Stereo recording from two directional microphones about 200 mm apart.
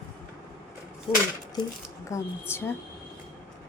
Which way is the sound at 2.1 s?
10° left (ahead or behind).